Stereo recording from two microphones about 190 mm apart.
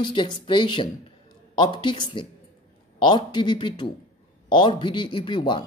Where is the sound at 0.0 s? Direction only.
25° left (ahead or behind).